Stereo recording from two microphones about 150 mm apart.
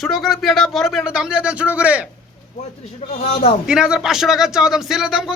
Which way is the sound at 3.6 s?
5° right (ahead or behind).